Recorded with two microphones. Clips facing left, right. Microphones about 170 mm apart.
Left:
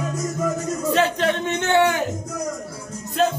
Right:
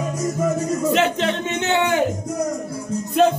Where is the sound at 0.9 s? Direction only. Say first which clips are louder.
Left 3 dB; 20° right (ahead or behind).